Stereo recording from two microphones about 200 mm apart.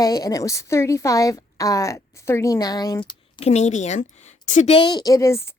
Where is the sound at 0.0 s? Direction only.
15° left (ahead or behind).